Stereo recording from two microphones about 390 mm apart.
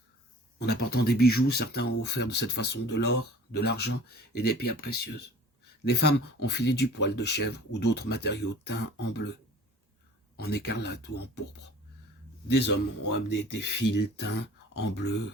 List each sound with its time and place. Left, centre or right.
0.6 s speech: left
10.3 s speech: left
12.5 s speech: left